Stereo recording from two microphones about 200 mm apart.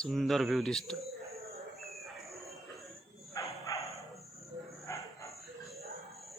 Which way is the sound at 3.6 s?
15° left (ahead or behind).